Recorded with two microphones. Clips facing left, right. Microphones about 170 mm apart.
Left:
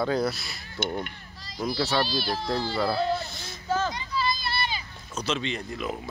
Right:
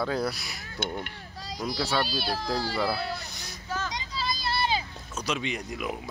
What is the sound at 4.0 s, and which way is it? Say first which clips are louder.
Vehicle: left 4 dB; 90° right.